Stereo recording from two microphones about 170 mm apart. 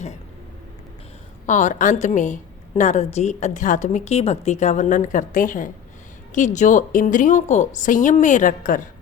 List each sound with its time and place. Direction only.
1.5 s a woman's voice: 45° left (ahead or behind)